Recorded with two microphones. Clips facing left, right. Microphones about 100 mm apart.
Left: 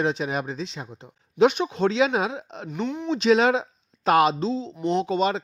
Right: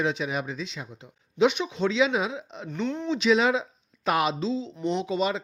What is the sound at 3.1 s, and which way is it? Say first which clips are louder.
Speech: left 3 dB; 45° left (ahead or behind).